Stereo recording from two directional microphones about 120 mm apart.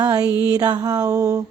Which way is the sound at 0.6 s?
35° right (ahead or behind).